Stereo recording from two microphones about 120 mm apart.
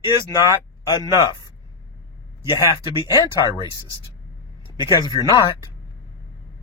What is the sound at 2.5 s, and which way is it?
Speech, 40° left (ahead or behind).